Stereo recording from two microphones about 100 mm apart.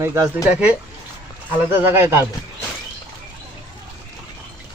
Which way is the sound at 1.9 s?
25° right (ahead or behind).